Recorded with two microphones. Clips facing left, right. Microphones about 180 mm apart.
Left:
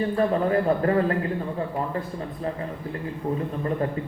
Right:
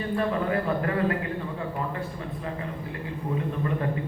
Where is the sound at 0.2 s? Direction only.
35° left (ahead or behind).